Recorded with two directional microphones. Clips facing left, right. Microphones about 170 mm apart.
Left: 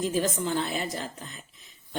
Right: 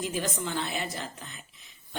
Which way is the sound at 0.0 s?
40° left (ahead or behind).